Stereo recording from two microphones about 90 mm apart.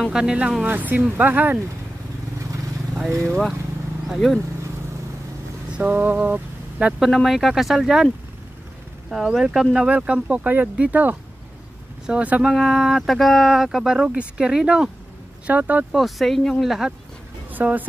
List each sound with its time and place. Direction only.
0.1 s speech: 10° right (ahead or behind)
3.3 s speech: centre (ahead or behind)
5.7 s speech: 15° right (ahead or behind)
7.0 s speech: centre (ahead or behind)
9.1 s speech: 5° right (ahead or behind)
12.5 s speech: 5° right (ahead or behind)
15.9 s speech: centre (ahead or behind)
17.5 s speech: 20° right (ahead or behind)